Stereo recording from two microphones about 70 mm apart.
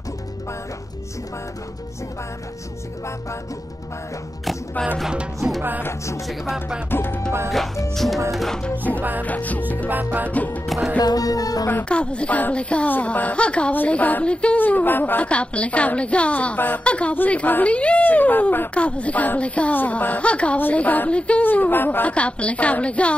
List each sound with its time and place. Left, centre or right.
5.0 s music: centre
5.8 s music: left
7.9 s speech: centre
8.6 s a woman's voice: left
9.8 s music: right
10.3 s a woman's voice: left
11.0 s music: left
11.9 s a woman's voice: centre
15.2 s a woman's voice: centre
18.8 s a woman's voice: centre
21.5 s a woman's voice: left